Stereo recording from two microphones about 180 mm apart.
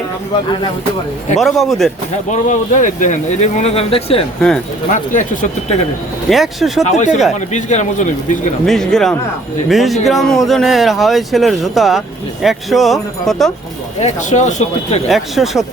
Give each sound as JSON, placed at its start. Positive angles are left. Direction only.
{"t": 1.4, "sound": "speech", "side_deg": 0}
{"t": 2.5, "sound": "speech", "side_deg": 45}
{"t": 4.4, "sound": "speech", "side_deg": 5}
{"t": 4.9, "sound": "speech", "side_deg": 45}
{"t": 6.2, "sound": "speech", "side_deg": 0}
{"t": 6.8, "sound": "speech", "side_deg": 40}
{"t": 8.6, "sound": "speech", "side_deg": 0}
{"t": 14.0, "sound": "speech", "side_deg": 40}
{"t": 15.1, "sound": "speech", "side_deg": 0}